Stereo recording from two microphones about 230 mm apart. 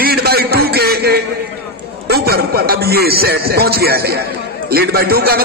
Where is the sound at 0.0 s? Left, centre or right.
Right.